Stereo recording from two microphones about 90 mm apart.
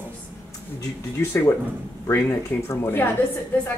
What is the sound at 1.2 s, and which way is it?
Speech, 30° left (ahead or behind).